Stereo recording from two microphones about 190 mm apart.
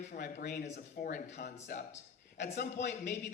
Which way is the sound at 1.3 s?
60° left (ahead or behind).